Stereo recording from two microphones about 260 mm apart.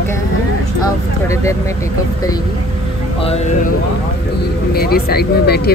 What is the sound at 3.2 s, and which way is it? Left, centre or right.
Speech, left.